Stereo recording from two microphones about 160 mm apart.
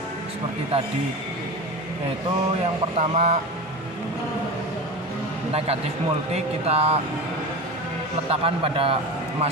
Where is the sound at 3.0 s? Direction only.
50° right (ahead or behind).